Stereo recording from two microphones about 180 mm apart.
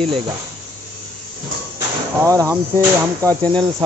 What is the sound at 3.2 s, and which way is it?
Cricket, 5° left (ahead or behind).